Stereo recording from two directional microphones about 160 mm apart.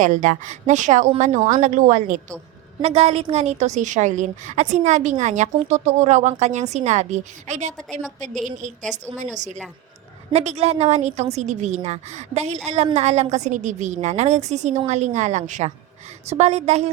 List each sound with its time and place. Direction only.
0.0 s speech: 50° right (ahead or behind)
2.8 s speech: 40° right (ahead or behind)